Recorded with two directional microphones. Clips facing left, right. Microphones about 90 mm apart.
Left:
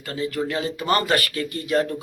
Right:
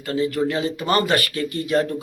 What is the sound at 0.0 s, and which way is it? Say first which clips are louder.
Speech: right 5 dB; 30° right (ahead or behind).